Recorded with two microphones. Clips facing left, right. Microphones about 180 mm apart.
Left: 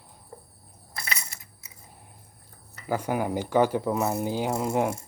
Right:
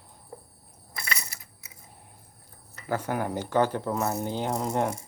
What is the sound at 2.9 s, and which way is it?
Speech, 10° left (ahead or behind).